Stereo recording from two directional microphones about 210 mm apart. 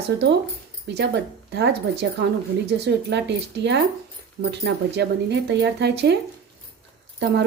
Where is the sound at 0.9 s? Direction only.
55° right (ahead or behind).